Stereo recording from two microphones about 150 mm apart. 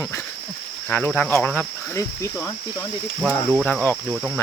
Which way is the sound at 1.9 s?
20° left (ahead or behind).